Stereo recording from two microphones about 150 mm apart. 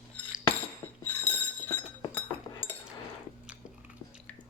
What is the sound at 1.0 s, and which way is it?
Chink, 15° left (ahead or behind).